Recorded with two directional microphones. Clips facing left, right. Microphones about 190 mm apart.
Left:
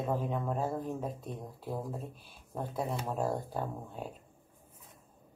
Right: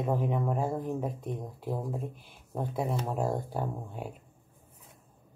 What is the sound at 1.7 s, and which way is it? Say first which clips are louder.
Speech: right 4 dB; centre (ahead or behind).